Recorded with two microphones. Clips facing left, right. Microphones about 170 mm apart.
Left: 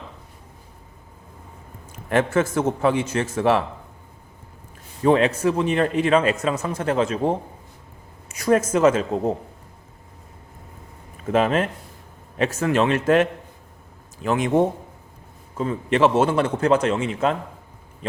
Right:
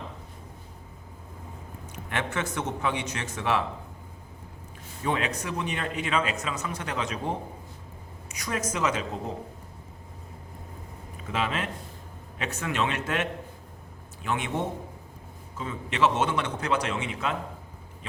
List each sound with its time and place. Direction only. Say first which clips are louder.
2.0 s a man's voice: left 11 dB; 40° left (ahead or behind)
5.0 s a man's voice: left 11 dB; 40° left (ahead or behind)
11.3 s a man's voice: left 10 dB; 45° left (ahead or behind)
14.3 s a man's voice: left 8 dB; 40° left (ahead or behind)
15.5 s speech: left 10 dB; 45° left (ahead or behind)
16.1 s a man's voice: left 8 dB; 35° left (ahead or behind)